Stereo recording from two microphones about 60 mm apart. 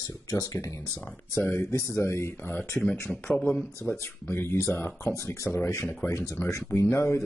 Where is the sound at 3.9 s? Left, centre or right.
Left.